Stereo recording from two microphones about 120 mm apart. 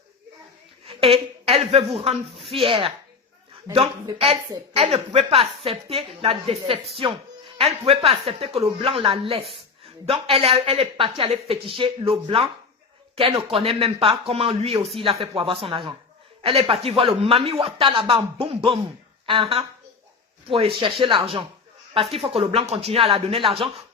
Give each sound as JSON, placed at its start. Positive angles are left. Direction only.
{"t": 0.9, "sound": "a woman's voice", "side_deg": -50}
{"t": 4.2, "sound": "a woman's voice", "side_deg": -55}
{"t": 13.4, "sound": "a woman's voice", "side_deg": -50}